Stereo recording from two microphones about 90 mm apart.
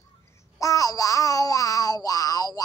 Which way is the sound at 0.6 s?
40° left (ahead or behind).